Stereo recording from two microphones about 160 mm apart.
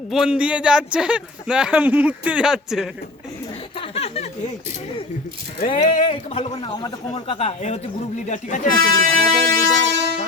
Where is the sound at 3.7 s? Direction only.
35° left (ahead or behind).